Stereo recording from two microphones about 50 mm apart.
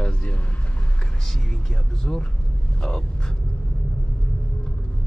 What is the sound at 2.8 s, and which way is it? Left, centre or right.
Speech, centre.